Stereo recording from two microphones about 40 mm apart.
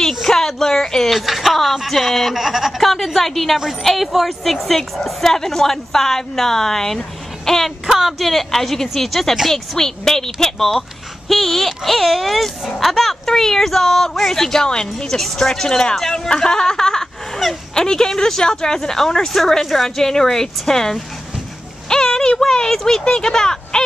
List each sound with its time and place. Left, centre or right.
0.2 s a sound: centre
1.2 s speech: centre
2.8 s speech: centre
7.8 s speech: centre
15.0 s speech: centre
21.8 s a sound: centre
22.4 s speech: centre